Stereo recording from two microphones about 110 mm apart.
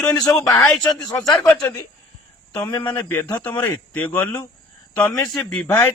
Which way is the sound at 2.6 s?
35° left (ahead or behind).